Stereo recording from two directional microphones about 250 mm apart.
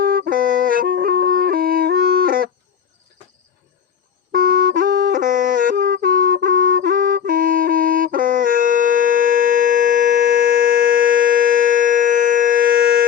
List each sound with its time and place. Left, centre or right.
0.0 s music: right
4.3 s music: right